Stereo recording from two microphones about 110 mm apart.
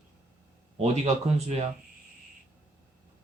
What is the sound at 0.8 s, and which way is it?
Speech, 75° right (ahead or behind).